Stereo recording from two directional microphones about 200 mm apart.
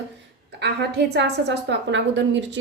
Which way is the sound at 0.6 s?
55° right (ahead or behind).